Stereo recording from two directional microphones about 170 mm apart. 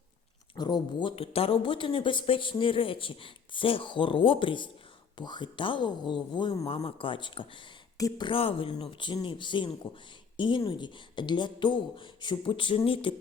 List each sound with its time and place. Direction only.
0.5 s a woman's voice: 25° left (ahead or behind)